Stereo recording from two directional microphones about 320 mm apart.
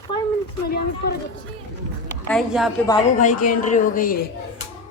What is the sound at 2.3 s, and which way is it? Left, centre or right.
Speech, centre.